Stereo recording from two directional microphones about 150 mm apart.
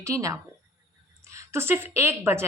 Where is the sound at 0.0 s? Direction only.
20° right (ahead or behind).